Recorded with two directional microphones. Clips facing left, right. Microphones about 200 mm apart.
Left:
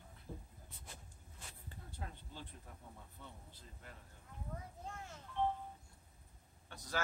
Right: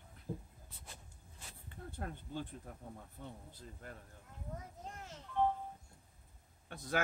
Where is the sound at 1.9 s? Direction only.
55° right (ahead or behind).